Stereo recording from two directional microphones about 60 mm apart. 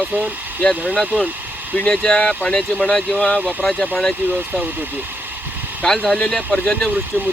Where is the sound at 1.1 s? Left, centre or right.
Centre.